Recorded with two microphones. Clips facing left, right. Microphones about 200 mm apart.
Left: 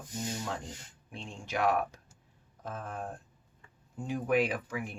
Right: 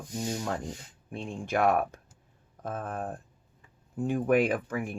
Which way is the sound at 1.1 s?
55° right (ahead or behind).